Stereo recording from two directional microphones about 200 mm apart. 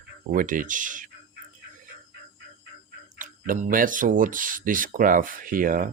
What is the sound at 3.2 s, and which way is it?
Speech, 40° right (ahead or behind).